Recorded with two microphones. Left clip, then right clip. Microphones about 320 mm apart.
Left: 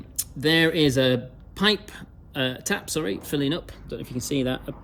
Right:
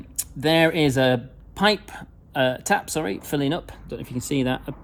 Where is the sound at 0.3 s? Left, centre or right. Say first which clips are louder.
Right 2 dB; centre.